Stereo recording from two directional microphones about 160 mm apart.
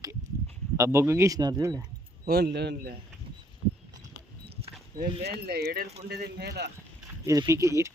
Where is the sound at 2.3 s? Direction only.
85° right.